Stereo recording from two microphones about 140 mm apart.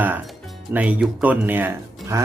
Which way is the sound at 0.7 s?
10° right (ahead or behind).